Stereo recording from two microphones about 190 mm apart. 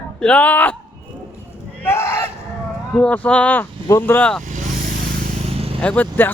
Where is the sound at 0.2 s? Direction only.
5° left (ahead or behind).